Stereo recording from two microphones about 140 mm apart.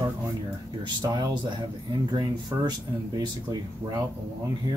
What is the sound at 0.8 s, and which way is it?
Speech, 30° right (ahead or behind).